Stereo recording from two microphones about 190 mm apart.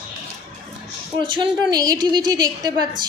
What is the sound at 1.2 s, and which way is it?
A woman's voice, 25° right (ahead or behind).